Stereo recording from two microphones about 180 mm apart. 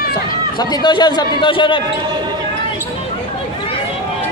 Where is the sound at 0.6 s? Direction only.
25° left (ahead or behind).